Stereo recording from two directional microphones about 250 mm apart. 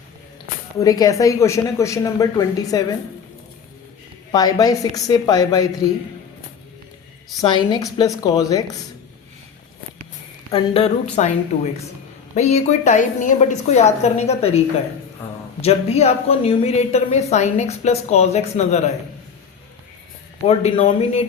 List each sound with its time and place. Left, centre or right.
0.8 s a woman's voice: centre
4.3 s a woman's voice: centre
7.4 s a woman's voice: centre
10.5 s a woman's voice: left
12.3 s a woman's voice: left
15.6 s a woman's voice: left
20.5 s a woman's voice: left